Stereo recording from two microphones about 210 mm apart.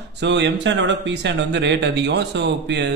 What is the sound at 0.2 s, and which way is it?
Speech, 55° right (ahead or behind).